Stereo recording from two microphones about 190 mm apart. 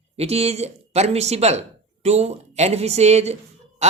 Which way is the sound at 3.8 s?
35° right (ahead or behind).